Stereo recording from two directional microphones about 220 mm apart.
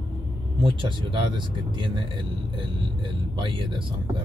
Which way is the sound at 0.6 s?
20° right (ahead or behind).